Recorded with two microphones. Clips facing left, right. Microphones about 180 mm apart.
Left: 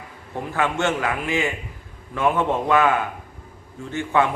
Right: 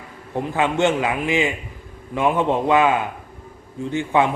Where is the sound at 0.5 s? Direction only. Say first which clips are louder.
Right 3 dB; 20° right (ahead or behind).